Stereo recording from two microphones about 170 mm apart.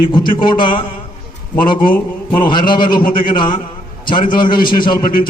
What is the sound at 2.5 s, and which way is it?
Speech, 25° left (ahead or behind).